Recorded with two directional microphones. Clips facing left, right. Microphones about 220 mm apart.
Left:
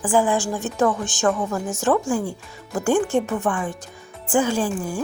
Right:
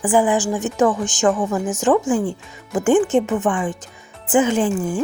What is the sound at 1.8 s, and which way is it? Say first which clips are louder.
Speech: right 3 dB; 15° right (ahead or behind).